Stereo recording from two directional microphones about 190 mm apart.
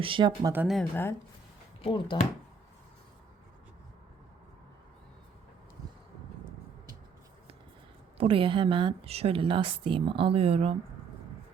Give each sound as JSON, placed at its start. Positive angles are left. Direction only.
{"t": 0.0, "sound": "a woman's voice", "side_deg": -25}
{"t": 0.5, "sound": "speech", "side_deg": -5}
{"t": 0.8, "sound": "speech", "side_deg": 10}
{"t": 1.8, "sound": "speech", "side_deg": 25}
{"t": 8.2, "sound": "a woman's voice", "side_deg": -30}